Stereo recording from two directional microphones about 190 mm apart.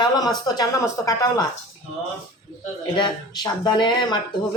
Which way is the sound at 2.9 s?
20° left (ahead or behind).